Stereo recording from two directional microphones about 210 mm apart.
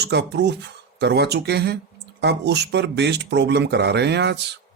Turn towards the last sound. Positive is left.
turn(degrees=-55)  # may be behind; listen again after turning